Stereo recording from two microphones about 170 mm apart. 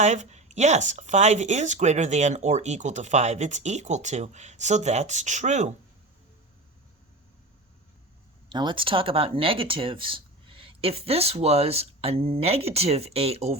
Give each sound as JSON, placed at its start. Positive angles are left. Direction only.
{"t": 0.0, "sound": "speech", "side_deg": -45}
{"t": 8.4, "sound": "speech", "side_deg": -25}